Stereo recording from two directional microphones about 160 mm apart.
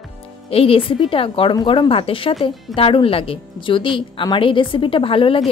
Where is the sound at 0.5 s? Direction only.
35° left (ahead or behind).